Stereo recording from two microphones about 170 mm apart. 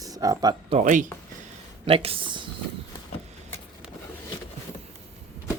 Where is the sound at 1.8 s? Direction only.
35° right (ahead or behind).